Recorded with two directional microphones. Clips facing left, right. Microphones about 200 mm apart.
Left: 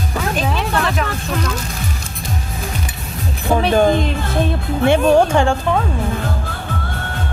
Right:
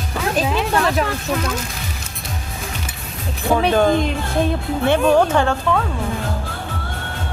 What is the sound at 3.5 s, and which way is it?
Speech, 15° left (ahead or behind).